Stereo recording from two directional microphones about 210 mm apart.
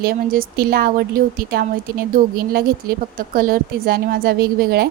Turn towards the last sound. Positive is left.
turn(degrees=-45)  # may be behind; listen again after turning